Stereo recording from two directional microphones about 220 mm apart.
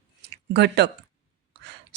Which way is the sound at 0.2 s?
50° right (ahead or behind).